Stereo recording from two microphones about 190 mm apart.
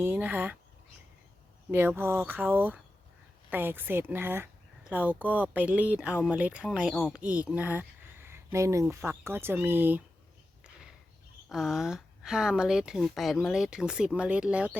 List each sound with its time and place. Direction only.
0.0 s speech: 10° right (ahead or behind)
1.7 s speech: 10° right (ahead or behind)
11.4 s speech: centre (ahead or behind)